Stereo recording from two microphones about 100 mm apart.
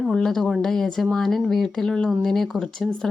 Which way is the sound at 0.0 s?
5° left (ahead or behind).